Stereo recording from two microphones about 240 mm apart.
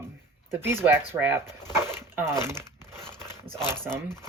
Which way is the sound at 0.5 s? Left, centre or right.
Centre.